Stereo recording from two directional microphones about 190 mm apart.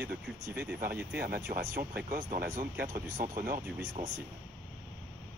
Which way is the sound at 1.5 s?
45° right (ahead or behind).